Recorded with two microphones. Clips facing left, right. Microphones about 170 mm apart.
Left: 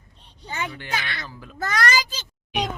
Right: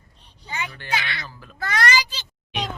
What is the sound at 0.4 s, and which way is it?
Speech, 50° left (ahead or behind).